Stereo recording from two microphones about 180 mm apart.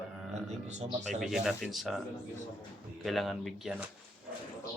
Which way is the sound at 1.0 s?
Centre (ahead or behind).